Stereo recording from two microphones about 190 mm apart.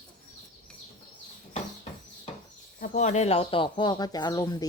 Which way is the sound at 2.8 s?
45° left (ahead or behind).